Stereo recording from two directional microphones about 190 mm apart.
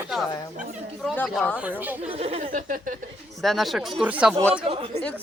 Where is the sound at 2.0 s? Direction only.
35° right (ahead or behind).